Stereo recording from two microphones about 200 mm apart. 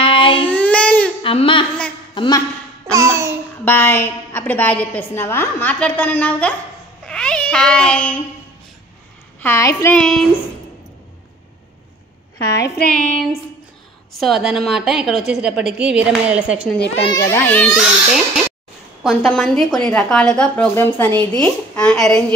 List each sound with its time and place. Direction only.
0.0 s a sound: 25° left (ahead or behind)
0.5 s baby cry: 5° left (ahead or behind)
1.2 s speech: 25° left (ahead or behind)
2.9 s babbling: 15° right (ahead or behind)
3.6 s a woman's voice: 10° left (ahead or behind)
9.4 s a woman's voice: 15° left (ahead or behind)
9.9 s a woman's voice: centre (ahead or behind)
12.4 s a woman's voice: 15° left (ahead or behind)
14.2 s a woman's voice: centre (ahead or behind)
17.0 s a woman's voice: 15° left (ahead or behind)